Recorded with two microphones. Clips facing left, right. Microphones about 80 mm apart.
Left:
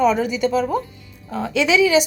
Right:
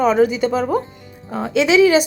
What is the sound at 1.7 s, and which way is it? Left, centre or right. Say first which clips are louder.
Speech: right 3 dB; right.